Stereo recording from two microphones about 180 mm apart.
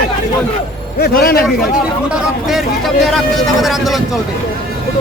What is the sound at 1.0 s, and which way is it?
Speech, 60° left (ahead or behind).